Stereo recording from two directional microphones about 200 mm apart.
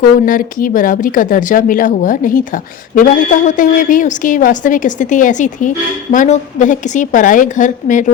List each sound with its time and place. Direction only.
0.0 s a woman's voice: 45° left (ahead or behind)